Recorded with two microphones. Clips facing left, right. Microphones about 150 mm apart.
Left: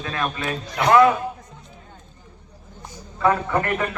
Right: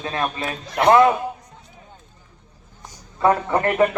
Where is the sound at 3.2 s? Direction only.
30° right (ahead or behind).